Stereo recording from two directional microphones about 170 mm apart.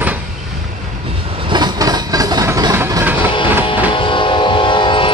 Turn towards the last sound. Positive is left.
turn(degrees=30)  # may be behind; listen again after turning